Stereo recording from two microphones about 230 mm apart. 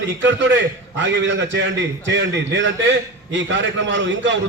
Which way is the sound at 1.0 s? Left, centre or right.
Right.